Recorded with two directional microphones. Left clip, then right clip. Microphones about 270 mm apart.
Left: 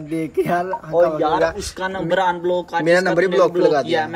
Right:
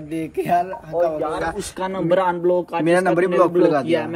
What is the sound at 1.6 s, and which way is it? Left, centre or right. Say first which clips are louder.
Speech: even; centre.